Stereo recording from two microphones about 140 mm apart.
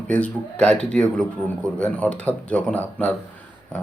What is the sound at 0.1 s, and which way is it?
Speech, 10° left (ahead or behind).